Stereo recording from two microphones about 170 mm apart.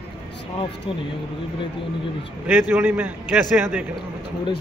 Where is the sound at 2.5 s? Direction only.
10° right (ahead or behind).